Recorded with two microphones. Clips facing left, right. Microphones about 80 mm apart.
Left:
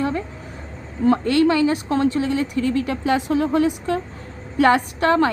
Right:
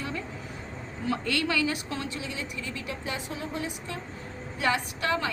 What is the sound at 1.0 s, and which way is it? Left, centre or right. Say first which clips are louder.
A woman's voice: left 13 dB; left.